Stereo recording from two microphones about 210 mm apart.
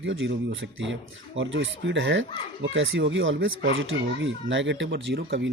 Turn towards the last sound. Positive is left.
turn(degrees=-55)  # may be behind; listen again after turning